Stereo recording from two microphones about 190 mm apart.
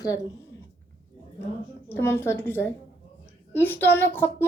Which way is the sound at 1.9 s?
15° left (ahead or behind).